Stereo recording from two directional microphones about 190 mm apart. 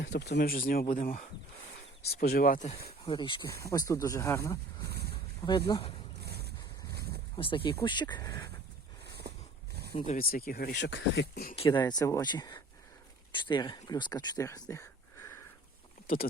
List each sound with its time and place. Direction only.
0.0 s speech: 60° left (ahead or behind); by 2.7 s 45° left (ahead or behind)
3.1 s speech: 25° left (ahead or behind)
4.9 s a sound: 55° right (ahead or behind)
5.5 s speech: 25° left (ahead or behind)
6.2 s vehicle: 55° right (ahead or behind)
6.9 s a sound: 55° right (ahead or behind)
7.3 s speech: 25° left (ahead or behind)
9.2 s a sound: 55° right (ahead or behind)
10.2 s speech: 50° left (ahead or behind)
11.5 s speech: 25° left (ahead or behind)